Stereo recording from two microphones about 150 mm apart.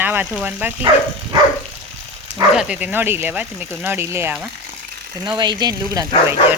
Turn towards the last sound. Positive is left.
turn(degrees=-25)  # may be behind; listen again after turning